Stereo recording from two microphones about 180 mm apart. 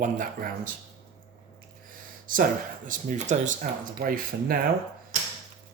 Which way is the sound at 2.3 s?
50° right (ahead or behind).